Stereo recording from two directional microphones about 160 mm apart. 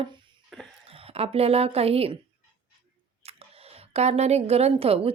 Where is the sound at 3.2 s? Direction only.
40° right (ahead or behind).